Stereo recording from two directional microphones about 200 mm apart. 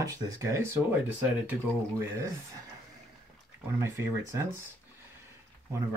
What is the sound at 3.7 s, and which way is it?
Speech, 10° right (ahead or behind).